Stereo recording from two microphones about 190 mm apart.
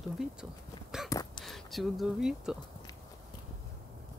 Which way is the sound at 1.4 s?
Centre (ahead or behind).